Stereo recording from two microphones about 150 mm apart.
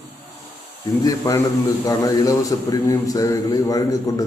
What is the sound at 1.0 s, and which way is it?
Mantra, 25° left (ahead or behind).